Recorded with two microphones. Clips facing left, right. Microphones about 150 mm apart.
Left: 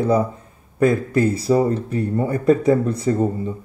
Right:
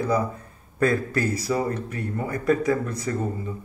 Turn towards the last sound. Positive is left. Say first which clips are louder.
# left 8 dB
turn(degrees=30)  # may be behind; listen again after turning